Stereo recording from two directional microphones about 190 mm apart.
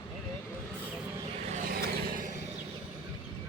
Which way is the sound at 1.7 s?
50° right (ahead or behind).